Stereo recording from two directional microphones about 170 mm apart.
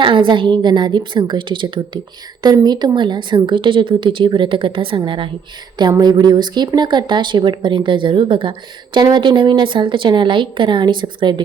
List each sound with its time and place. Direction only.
0.0 s speech: 30° right (ahead or behind)